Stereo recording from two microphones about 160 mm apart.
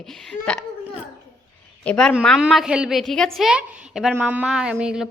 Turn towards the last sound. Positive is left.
turn(degrees=-5)  # may be behind; listen again after turning